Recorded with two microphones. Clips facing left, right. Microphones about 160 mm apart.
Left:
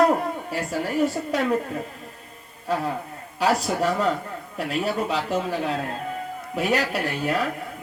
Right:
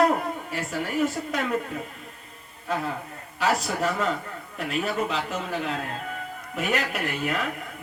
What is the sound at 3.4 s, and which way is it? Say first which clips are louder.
A man's voice: left 3 dB; 35° left (ahead or behind).